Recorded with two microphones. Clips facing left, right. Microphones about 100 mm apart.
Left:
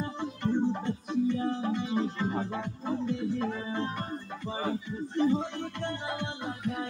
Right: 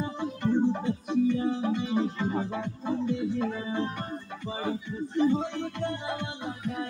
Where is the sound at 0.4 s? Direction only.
10° right (ahead or behind).